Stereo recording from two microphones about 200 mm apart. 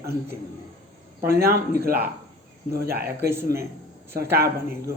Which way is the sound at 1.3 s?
50° right (ahead or behind).